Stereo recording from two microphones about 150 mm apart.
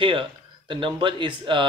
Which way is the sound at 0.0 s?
35° right (ahead or behind).